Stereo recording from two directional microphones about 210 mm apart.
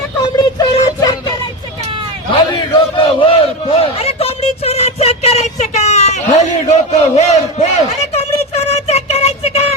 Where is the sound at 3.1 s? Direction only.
25° left (ahead or behind).